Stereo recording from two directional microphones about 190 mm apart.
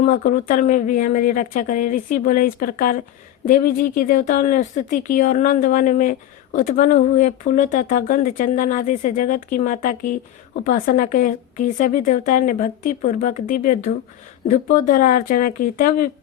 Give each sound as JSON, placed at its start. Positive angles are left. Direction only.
{"t": 0.0, "sound": "speech", "side_deg": 40}